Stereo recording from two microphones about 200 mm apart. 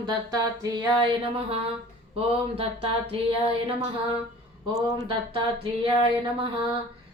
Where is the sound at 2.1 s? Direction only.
30° right (ahead or behind).